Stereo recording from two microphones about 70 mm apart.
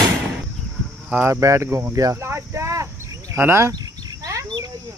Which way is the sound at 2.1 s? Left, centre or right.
Right.